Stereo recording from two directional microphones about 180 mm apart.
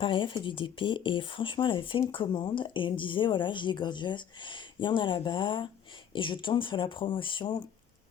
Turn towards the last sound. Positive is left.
turn(degrees=25)  # may be behind; listen again after turning